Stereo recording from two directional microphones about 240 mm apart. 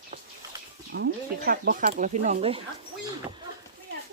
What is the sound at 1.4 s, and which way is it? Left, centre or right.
Speech, right.